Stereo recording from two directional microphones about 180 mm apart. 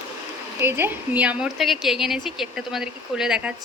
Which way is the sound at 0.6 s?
10° right (ahead or behind).